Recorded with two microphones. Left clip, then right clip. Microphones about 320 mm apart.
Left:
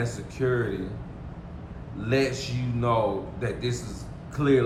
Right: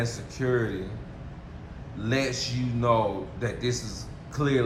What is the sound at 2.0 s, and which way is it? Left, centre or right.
Speech, centre.